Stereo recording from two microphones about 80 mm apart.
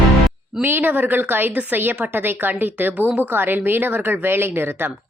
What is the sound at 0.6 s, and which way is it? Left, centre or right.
A woman's voice, right.